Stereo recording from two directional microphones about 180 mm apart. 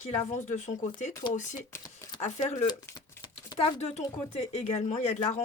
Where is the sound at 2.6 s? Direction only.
25° left (ahead or behind).